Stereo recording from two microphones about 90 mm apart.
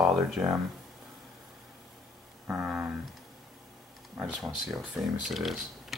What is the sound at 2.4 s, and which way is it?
Speech, 10° right (ahead or behind).